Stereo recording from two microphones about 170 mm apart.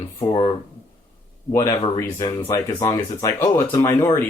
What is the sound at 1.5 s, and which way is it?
Speech, 20° left (ahead or behind).